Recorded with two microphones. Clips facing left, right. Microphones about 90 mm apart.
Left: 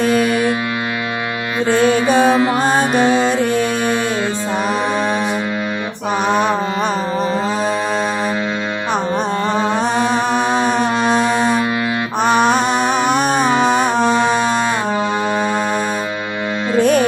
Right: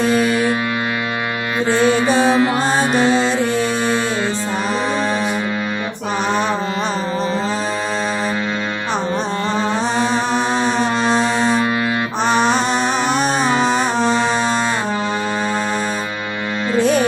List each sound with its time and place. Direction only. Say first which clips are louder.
0.1 s music: left 1 dB; 55° left (ahead or behind)
1.8 s music: left 2 dB; 50° left (ahead or behind)
6.2 s music: left 3 dB; 50° left (ahead or behind)
8.9 s music: left 3 dB; 50° left (ahead or behind)
12.2 s mantra: left 3 dB; 50° left (ahead or behind)
12.9 s music: left 2 dB; 55° left (ahead or behind)
14.3 s music: left 2 dB; 10° left (ahead or behind)
16.7 s music: left 2 dB; 50° left (ahead or behind)